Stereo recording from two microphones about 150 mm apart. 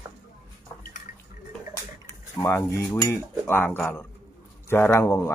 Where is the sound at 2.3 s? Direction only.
20° left (ahead or behind).